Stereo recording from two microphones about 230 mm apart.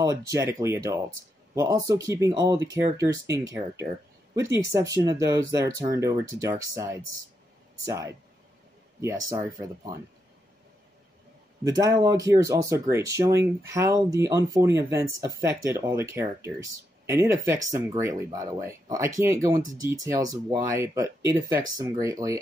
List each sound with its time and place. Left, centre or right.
0.3 s speech: centre
11.6 s speech: centre